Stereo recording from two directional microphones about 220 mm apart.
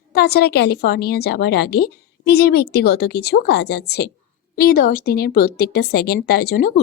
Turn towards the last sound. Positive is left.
turn(degrees=45)  # may be behind; listen again after turning